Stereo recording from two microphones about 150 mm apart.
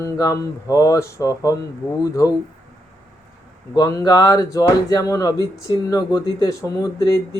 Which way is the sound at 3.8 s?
25° left (ahead or behind).